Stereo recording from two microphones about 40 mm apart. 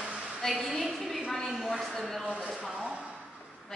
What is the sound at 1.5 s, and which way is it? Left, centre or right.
Speech, centre.